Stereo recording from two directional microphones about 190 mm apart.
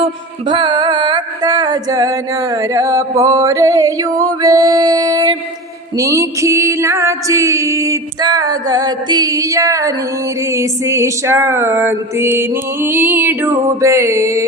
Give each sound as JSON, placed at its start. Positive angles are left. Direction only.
{"t": 0.0, "sound": "music", "side_deg": -25}